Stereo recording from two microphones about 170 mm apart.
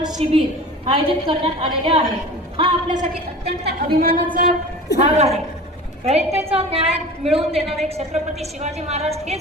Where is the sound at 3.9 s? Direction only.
60° right (ahead or behind).